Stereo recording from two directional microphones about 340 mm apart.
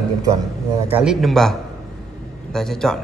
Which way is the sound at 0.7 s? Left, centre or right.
Centre.